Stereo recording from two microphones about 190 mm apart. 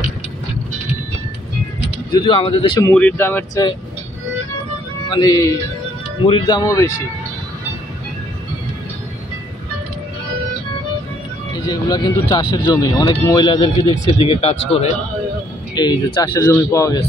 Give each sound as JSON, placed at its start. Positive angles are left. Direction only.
{"t": 2.1, "sound": "speech", "side_deg": 25}
{"t": 2.8, "sound": "speech", "side_deg": 5}
{"t": 5.1, "sound": "speech", "side_deg": 20}
{"t": 11.6, "sound": "a man's voice", "side_deg": 20}